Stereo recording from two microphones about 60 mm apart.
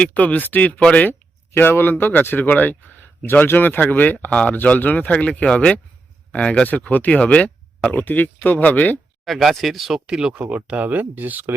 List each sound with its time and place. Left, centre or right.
0.0 s speech: left
1.5 s speech: left
9.2 s speech: centre; by 11.5 s right